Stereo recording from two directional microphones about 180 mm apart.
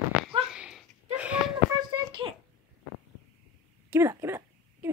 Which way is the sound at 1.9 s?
25° right (ahead or behind).